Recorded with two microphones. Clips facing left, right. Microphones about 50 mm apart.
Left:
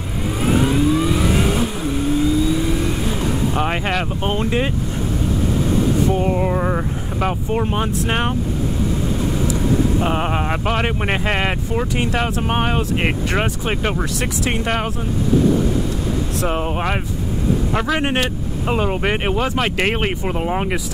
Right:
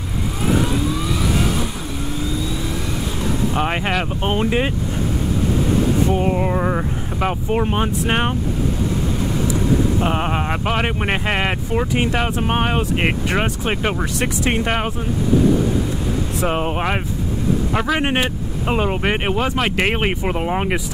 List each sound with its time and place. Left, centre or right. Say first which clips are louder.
0.5 s vehicle: left 3 dB; centre
3.5 s speech: even; centre
6.0 s speech: even; centre
9.9 s speech: even; centre
16.3 s speech: right 2 dB; centre